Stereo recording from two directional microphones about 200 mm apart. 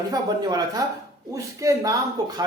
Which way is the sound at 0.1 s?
20° right (ahead or behind).